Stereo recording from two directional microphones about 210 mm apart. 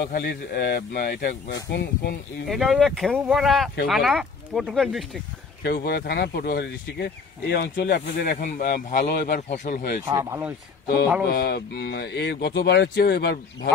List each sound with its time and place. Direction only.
0.0 s speech: 50° left (ahead or behind)
2.4 s speech: centre (ahead or behind)
5.6 s speech: 45° left (ahead or behind)
9.5 s speech: 35° left (ahead or behind)
10.0 s speech: 15° right (ahead or behind)
11.2 s speech: 50° left (ahead or behind)